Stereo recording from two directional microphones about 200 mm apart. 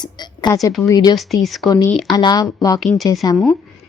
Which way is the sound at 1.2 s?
Centre (ahead or behind).